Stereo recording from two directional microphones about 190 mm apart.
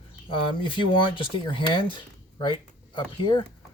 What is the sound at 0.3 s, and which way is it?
Speech, 25° left (ahead or behind).